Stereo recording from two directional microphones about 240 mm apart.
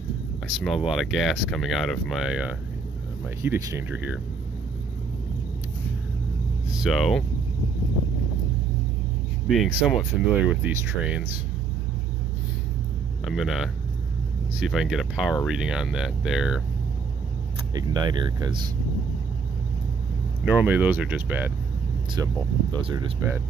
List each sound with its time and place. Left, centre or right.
0.8 s speech: centre
6.8 s speech: centre
9.5 s speech: centre
13.2 s speech: centre
17.7 s speech: centre
20.4 s speech: centre